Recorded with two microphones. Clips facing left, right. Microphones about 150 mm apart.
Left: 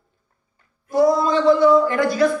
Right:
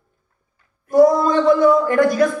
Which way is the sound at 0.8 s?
50° right (ahead or behind).